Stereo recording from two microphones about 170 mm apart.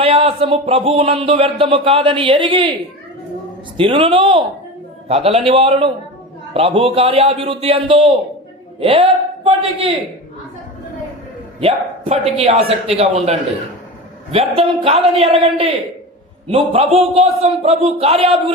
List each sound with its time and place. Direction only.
0.0 s speech: 35° right (ahead or behind)
3.8 s speech: 30° right (ahead or behind)
11.6 s speech: 35° right (ahead or behind)